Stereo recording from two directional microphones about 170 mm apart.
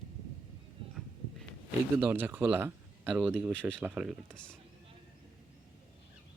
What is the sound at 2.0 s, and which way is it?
Speech, 10° right (ahead or behind).